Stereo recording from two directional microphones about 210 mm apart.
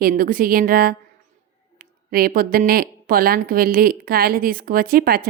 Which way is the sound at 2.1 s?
45° right (ahead or behind).